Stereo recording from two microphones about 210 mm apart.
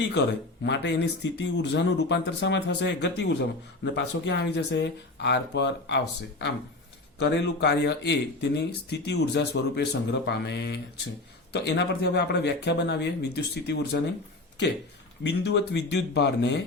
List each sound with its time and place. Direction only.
0.6 s speech: 55° left (ahead or behind)
7.2 s speech: 55° left (ahead or behind)
15.2 s speech: 55° left (ahead or behind)